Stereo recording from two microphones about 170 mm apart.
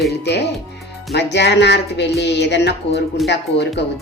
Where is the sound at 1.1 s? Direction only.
90° left.